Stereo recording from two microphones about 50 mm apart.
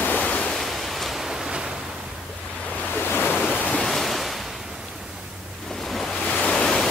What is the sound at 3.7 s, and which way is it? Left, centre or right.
Waves, centre.